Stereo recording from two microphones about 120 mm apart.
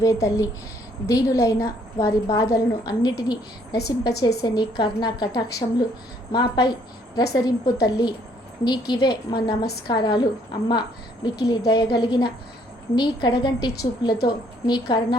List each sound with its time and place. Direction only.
0.0 s a woman's voice: 25° left (ahead or behind)